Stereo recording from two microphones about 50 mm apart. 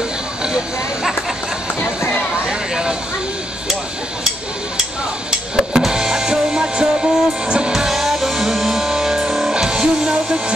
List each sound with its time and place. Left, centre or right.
2.7 s a sound: centre
5.8 s music: centre
7.7 s music: centre